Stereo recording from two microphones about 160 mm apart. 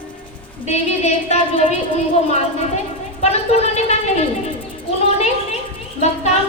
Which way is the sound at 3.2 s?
40° left (ahead or behind).